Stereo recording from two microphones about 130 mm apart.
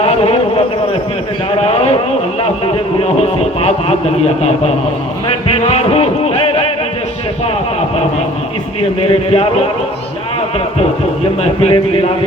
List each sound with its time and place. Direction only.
0.0 s a sound: 50° left (ahead or behind)
1.6 s a man's voice: 50° left (ahead or behind)
3.0 s a man's voice: 50° left (ahead or behind)
5.5 s music: 50° left (ahead or behind)
9.0 s a man's voice: 50° left (ahead or behind)
11.6 s a man's voice: 45° left (ahead or behind)